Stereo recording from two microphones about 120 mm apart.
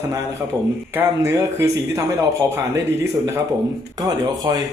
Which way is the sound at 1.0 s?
20° right (ahead or behind).